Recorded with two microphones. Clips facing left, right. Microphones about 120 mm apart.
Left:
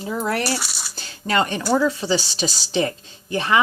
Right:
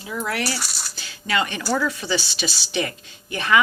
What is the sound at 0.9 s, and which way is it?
Speech, 40° left (ahead or behind).